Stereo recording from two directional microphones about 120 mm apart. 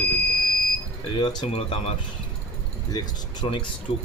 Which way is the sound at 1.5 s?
60° left (ahead or behind).